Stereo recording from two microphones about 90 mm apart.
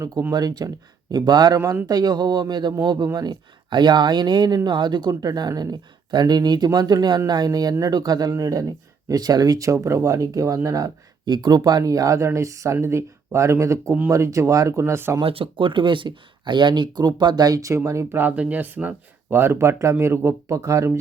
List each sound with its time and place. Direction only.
0.0 s speech: 35° right (ahead or behind); by 1.5 s 55° right (ahead or behind)
1.5 s speech: 35° right (ahead or behind)
11.3 s speech: 55° right (ahead or behind); by 15.1 s 30° right (ahead or behind)
15.2 s speech: 85° right; by 18.2 s 35° right (ahead or behind)
18.2 s speech: 20° right (ahead or behind); by 21.0 s 35° right (ahead or behind)